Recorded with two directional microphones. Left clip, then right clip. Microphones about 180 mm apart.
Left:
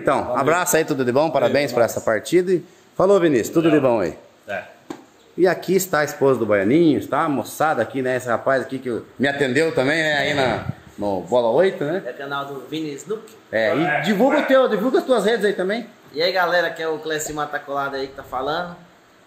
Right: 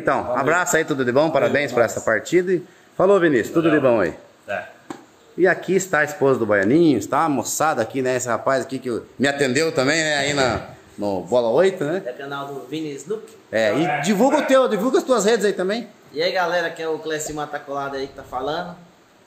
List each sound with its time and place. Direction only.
0.0 s a man's voice: 10° left (ahead or behind)